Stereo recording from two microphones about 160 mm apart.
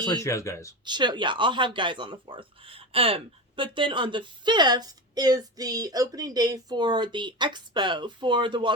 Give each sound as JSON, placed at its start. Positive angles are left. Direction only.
{"t": 0.0, "sound": "speech", "side_deg": 20}
{"t": 0.9, "sound": "speech", "side_deg": -30}